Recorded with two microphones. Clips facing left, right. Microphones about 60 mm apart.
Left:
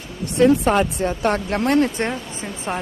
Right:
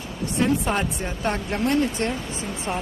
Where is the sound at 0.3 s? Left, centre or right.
Left.